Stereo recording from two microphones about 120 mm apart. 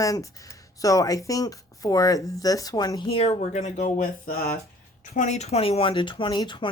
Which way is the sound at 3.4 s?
75° left (ahead or behind).